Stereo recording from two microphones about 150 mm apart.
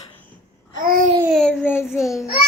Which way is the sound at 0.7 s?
70° right (ahead or behind).